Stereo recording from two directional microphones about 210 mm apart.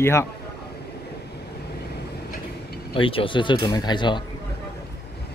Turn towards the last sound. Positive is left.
turn(degrees=20)  # may be behind; listen again after turning